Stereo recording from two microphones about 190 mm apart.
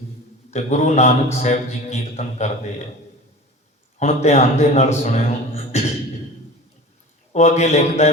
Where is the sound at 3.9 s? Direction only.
35° left (ahead or behind).